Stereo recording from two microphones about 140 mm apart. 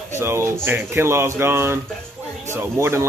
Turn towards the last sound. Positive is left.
turn(degrees=-20)  # may be behind; listen again after turning